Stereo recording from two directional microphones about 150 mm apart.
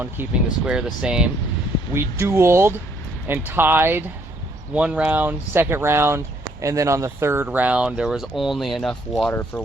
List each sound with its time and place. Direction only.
0.0 s speech: 10° right (ahead or behind)